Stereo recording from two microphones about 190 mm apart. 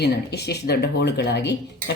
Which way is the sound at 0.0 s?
60° left (ahead or behind).